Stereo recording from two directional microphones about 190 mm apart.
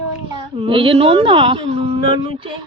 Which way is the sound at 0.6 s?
25° right (ahead or behind).